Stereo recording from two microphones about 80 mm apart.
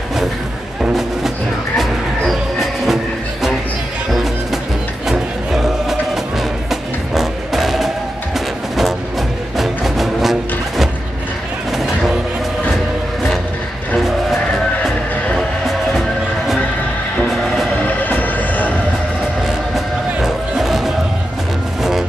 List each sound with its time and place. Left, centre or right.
0.8 s music: centre
4.1 s music: centre
9.6 s music: centre
11.7 s a sound: centre
17.3 s music: centre
17.8 s music: left
19.4 s music: centre